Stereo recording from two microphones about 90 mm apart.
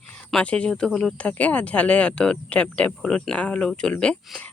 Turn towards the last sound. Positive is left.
turn(degrees=10)  # may be behind; listen again after turning